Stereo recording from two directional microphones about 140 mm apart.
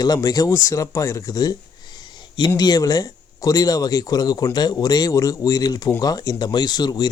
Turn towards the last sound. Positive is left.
turn(degrees=30)  # may be behind; listen again after turning